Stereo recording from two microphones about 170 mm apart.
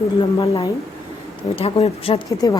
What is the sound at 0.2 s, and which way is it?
Speech, 30° left (ahead or behind).